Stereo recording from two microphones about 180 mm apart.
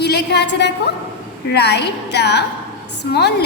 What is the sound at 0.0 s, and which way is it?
A woman's voice, 65° left (ahead or behind).